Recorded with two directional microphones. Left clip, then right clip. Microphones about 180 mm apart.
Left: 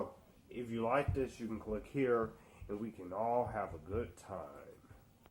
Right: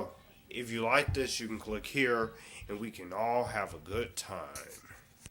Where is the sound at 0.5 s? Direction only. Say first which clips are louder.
Right 6 dB; 15° right (ahead or behind).